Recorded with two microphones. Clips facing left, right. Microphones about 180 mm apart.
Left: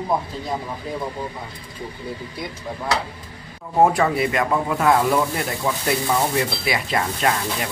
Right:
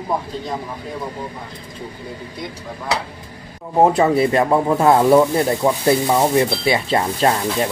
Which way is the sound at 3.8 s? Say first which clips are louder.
Right 3 dB; 20° right (ahead or behind).